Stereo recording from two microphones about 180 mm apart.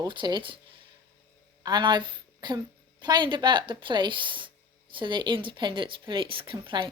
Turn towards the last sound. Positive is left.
turn(degrees=-30)  # may be behind; listen again after turning